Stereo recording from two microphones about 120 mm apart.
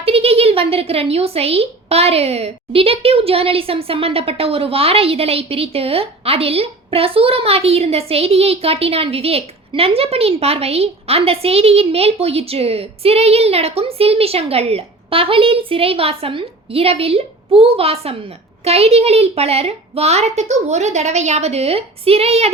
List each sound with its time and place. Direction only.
0.0 s speech: 55° right (ahead or behind)